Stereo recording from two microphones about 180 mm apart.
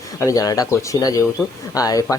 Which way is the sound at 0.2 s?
20° left (ahead or behind).